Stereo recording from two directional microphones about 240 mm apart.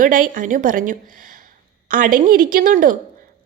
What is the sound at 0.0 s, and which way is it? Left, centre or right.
A woman's voice, right.